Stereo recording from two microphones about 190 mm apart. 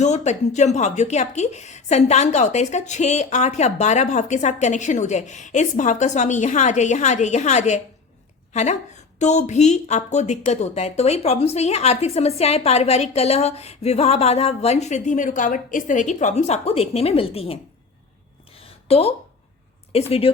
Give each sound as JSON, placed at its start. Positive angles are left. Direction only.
{"t": 0.0, "sound": "a woman's voice", "side_deg": 40}
{"t": 18.5, "sound": "a sound", "side_deg": 30}
{"t": 19.9, "sound": "a woman's voice", "side_deg": 30}